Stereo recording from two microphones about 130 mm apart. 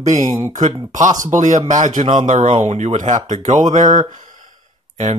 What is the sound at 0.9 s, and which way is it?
Speech, 70° right (ahead or behind).